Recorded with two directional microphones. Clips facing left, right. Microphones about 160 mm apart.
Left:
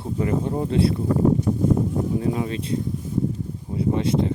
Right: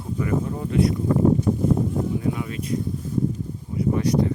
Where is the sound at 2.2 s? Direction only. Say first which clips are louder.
Left 2 dB; 30° left (ahead or behind).